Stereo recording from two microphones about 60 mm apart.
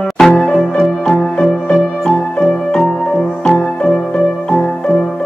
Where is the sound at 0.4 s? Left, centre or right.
Centre.